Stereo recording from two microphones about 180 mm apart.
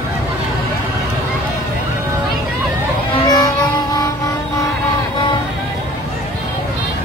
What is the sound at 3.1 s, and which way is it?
Music, 20° left (ahead or behind).